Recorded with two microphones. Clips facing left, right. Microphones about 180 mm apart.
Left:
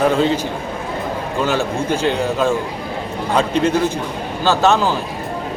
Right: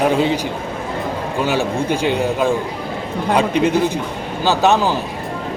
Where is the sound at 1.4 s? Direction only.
15° right (ahead or behind).